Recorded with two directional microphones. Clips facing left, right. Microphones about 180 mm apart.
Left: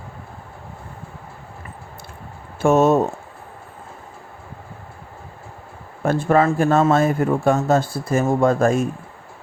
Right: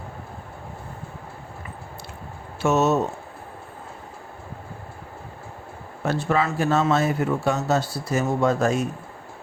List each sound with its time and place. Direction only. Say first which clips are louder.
2.6 s a man's voice: left 5 dB; 50° left (ahead or behind)
6.0 s a man's voice: left 6 dB; 50° left (ahead or behind)